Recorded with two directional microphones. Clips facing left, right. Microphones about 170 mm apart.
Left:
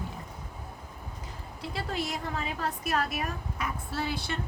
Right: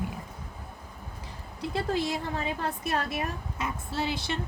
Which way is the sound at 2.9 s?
25° right (ahead or behind).